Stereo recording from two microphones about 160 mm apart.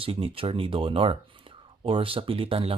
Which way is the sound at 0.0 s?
35° right (ahead or behind).